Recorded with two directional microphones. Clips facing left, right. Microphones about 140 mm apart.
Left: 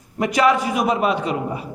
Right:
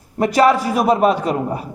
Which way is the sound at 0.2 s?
35° right (ahead or behind).